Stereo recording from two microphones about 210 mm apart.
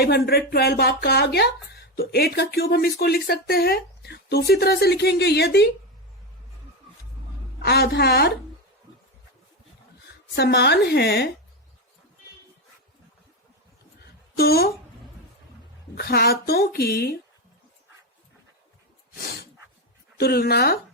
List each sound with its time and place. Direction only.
0.0 s speech: 50° left (ahead or behind)
7.6 s speech: 50° left (ahead or behind)
10.3 s speech: 50° left (ahead or behind)
14.3 s speech: 45° left (ahead or behind)
16.0 s speech: 50° left (ahead or behind)
20.1 s speech: 50° left (ahead or behind)